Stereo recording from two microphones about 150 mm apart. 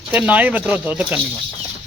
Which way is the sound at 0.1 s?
10° right (ahead or behind).